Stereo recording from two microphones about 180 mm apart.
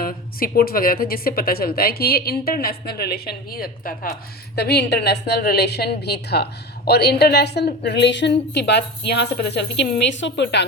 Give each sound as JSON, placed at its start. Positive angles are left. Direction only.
{"t": 0.0, "sound": "a woman's voice", "side_deg": 55}